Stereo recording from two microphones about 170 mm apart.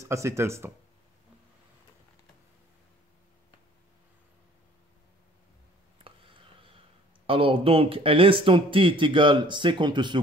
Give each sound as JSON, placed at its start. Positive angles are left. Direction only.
{"t": 0.0, "sound": "speech", "side_deg": -15}
{"t": 6.0, "sound": "a sound", "side_deg": -30}
{"t": 7.2, "sound": "speech", "side_deg": -30}